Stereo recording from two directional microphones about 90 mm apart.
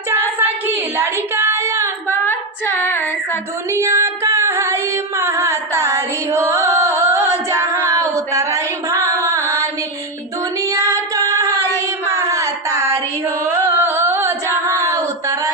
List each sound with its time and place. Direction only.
0.1 s a sound: 25° right (ahead or behind)
2.0 s female singing: 20° left (ahead or behind)
3.7 s music: 30° right (ahead or behind)
10.7 s singing: 35° right (ahead or behind)
12.1 s a sound: 35° right (ahead or behind)
13.2 s singing: 25° right (ahead or behind)